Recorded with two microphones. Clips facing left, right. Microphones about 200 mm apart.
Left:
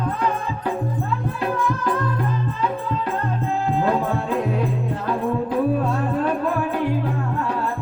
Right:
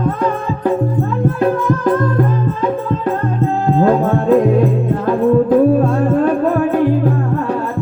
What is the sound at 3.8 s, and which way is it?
Music, 45° right (ahead or behind).